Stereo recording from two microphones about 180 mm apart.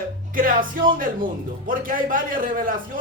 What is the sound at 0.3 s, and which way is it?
Speech, 50° right (ahead or behind).